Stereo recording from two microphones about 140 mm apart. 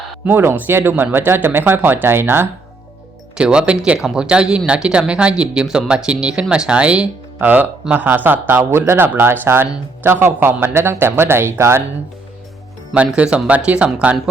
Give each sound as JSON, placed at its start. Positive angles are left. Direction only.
{"t": 0.3, "sound": "speech", "side_deg": -15}
{"t": 12.9, "sound": "speech", "side_deg": -10}